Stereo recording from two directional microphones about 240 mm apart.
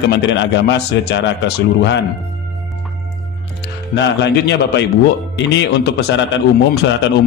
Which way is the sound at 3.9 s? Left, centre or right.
Left.